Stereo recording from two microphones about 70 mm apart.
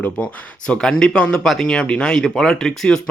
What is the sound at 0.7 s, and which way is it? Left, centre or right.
Speech, centre.